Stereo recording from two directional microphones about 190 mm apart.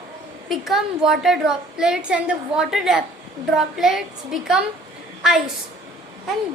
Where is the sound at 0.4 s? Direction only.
Centre (ahead or behind).